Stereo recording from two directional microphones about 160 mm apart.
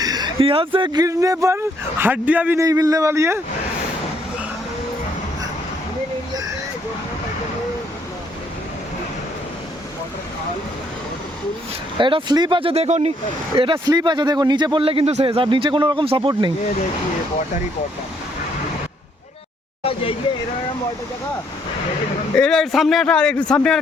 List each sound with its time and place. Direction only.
0.0 s speech: 25° right (ahead or behind)
2.6 s speech: 20° right (ahead or behind)
11.9 s a man's voice: 30° right (ahead or behind)
13.6 s a man's voice: 30° right (ahead or behind)
19.8 s speech: 35° left (ahead or behind)
22.4 s a man's voice: 5° left (ahead or behind)